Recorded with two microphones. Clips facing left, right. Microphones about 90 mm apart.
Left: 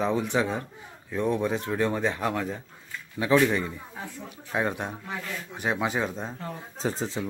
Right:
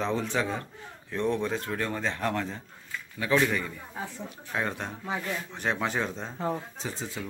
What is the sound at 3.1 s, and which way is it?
A man's voice, 20° left (ahead or behind).